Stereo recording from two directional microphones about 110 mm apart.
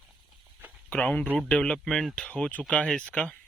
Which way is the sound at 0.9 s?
15° left (ahead or behind).